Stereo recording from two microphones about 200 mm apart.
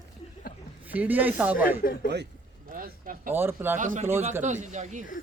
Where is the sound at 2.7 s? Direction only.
45° right (ahead or behind).